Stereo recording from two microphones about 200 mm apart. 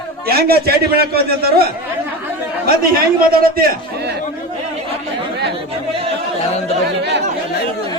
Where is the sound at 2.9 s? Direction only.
45° right (ahead or behind).